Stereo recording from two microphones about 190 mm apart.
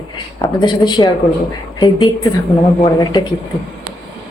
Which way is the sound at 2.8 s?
20° left (ahead or behind).